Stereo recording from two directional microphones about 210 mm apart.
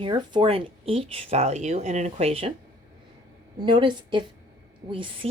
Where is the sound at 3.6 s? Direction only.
20° right (ahead or behind).